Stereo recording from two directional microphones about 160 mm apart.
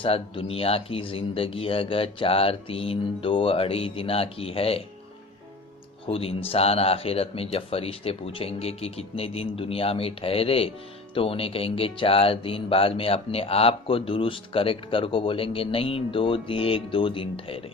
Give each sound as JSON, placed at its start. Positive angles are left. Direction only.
{"t": 0.0, "sound": "speech", "side_deg": 35}
{"t": 6.1, "sound": "speech", "side_deg": 35}